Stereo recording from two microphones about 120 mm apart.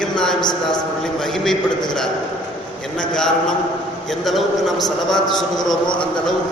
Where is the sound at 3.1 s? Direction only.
5° left (ahead or behind).